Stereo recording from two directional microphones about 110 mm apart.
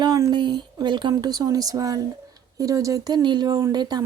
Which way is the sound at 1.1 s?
35° right (ahead or behind).